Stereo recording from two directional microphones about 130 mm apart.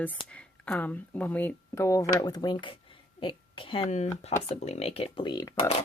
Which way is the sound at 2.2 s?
35° left (ahead or behind).